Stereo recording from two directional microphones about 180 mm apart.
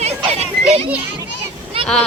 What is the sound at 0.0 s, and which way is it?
Children playing, 35° right (ahead or behind).